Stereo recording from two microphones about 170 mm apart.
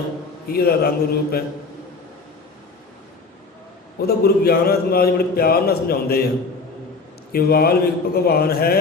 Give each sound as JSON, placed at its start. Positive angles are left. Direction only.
{"t": 0.5, "sound": "a man's voice", "side_deg": 65}
{"t": 4.0, "sound": "a man's voice", "side_deg": 65}
{"t": 7.3, "sound": "a man's voice", "side_deg": 65}